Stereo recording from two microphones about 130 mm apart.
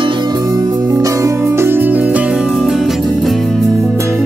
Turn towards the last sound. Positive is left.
turn(degrees=0)  # may be behind; listen again after turning